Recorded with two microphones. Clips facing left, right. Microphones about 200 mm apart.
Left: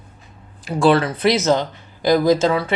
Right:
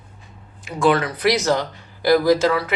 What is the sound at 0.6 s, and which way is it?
Speech, 30° left (ahead or behind).